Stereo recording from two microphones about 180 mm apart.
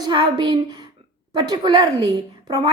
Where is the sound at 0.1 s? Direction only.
25° right (ahead or behind).